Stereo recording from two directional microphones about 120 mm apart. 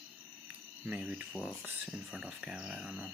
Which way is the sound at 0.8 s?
10° right (ahead or behind).